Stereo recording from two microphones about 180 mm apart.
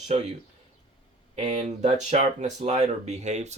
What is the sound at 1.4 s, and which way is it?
Speech, 35° right (ahead or behind).